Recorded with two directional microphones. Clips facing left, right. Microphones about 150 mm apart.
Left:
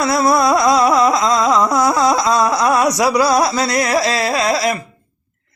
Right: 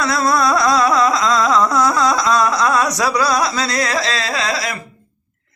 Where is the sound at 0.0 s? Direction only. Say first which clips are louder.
Left 3 dB; 20° left (ahead or behind).